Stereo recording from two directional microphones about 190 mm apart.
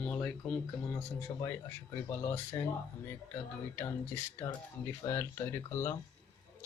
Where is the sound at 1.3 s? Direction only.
25° left (ahead or behind).